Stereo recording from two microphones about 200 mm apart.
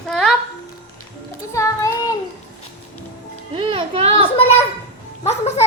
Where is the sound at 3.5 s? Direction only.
30° right (ahead or behind).